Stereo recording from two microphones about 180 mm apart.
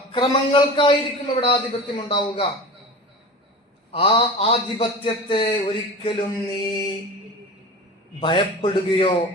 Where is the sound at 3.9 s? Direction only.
30° left (ahead or behind).